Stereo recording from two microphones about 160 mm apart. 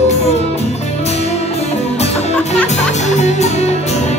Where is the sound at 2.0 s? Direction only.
40° left (ahead or behind).